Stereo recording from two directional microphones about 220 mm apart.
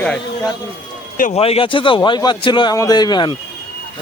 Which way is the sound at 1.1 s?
35° left (ahead or behind).